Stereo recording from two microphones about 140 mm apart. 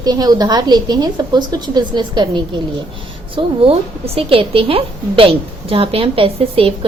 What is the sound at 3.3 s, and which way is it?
A woman's voice, 45° right (ahead or behind).